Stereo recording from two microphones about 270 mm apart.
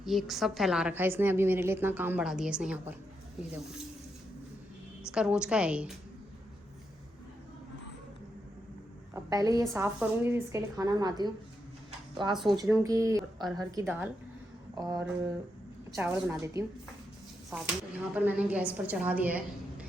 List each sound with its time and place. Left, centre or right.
0.0 s a woman's voice: centre
5.1 s a woman's voice: centre
9.1 s a woman's voice: centre
18.1 s a woman's voice: centre